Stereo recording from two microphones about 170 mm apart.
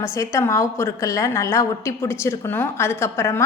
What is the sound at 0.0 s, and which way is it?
A woman's voice, 20° left (ahead or behind).